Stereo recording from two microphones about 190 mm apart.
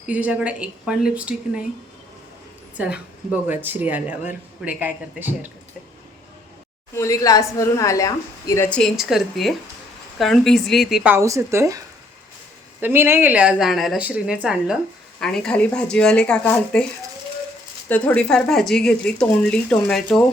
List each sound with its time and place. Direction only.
0.0 s speech: 5° right (ahead or behind)
2.7 s speech: 5° right (ahead or behind)
6.9 s a woman's voice: 15° left (ahead or behind)
8.8 s speech: centre (ahead or behind)
12.8 s speech: 10° right (ahead or behind); by 16.8 s 5° left (ahead or behind)
17.8 s speech: 10° left (ahead or behind)